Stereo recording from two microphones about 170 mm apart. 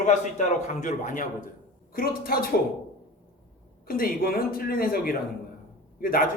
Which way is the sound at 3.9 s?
60° left (ahead or behind).